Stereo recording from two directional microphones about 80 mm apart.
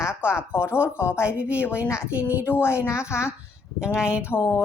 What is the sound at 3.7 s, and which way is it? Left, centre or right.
Speech, centre.